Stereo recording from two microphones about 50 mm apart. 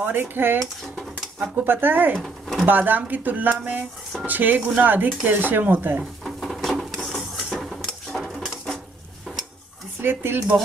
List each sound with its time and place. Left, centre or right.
0.0 s speech: right
1.6 s speech: right
4.6 s speech: right
4.8 s speech: right
6.2 s a sound: centre
6.8 s sewing machine: centre
7.4 s a sound: centre
8.1 s dishes: centre
10.0 s speech: right